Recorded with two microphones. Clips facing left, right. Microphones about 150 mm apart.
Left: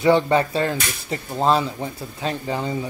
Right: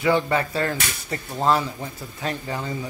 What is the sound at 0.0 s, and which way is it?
Speech, 25° left (ahead or behind).